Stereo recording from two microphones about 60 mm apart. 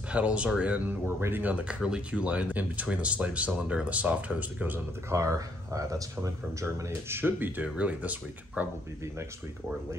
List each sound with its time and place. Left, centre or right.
0.1 s speech: right
1.0 s speech: right
1.4 s speech: right
5.1 s speech: right
7.2 s speech: right
7.6 s speech: right